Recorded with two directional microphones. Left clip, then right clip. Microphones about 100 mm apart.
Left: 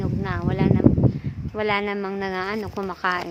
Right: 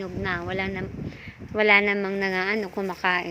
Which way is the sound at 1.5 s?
5° right (ahead or behind).